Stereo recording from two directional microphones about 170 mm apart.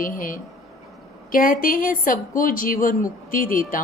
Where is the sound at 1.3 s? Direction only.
55° left (ahead or behind).